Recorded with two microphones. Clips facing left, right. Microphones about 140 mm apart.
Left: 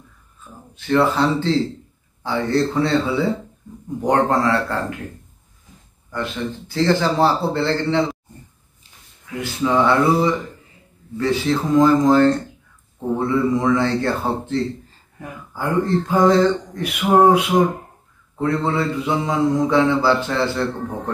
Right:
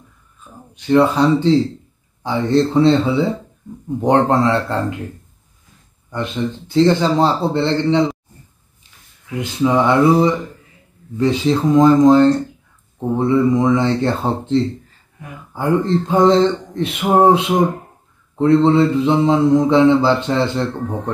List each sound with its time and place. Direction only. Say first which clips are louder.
0.4 s speech: right 1 dB; 20° right (ahead or behind)
2.2 s mantra: right 4 dB; 20° right (ahead or behind)
6.1 s mantra: right 3 dB; 20° right (ahead or behind)
9.3 s mantra: right 3 dB; 20° right (ahead or behind)